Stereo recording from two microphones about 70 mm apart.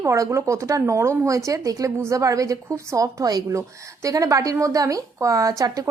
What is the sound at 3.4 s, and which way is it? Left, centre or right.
A woman's voice, right.